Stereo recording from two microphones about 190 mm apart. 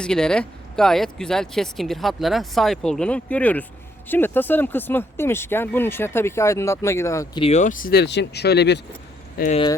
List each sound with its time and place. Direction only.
0.0 s speech: 5° left (ahead or behind)
7.4 s speech: 40° left (ahead or behind); by 8.8 s 60° left (ahead or behind)
9.4 s speech: 50° left (ahead or behind)